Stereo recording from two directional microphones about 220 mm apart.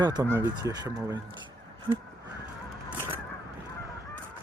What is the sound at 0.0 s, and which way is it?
Speech, 20° right (ahead or behind).